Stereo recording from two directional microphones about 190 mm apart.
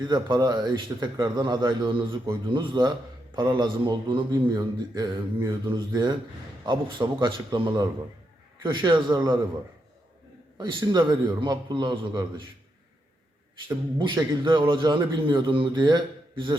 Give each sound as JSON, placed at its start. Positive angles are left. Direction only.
{"t": 0.0, "sound": "speech", "side_deg": -25}
{"t": 10.6, "sound": "speech", "side_deg": -25}
{"t": 14.0, "sound": "speech", "side_deg": -25}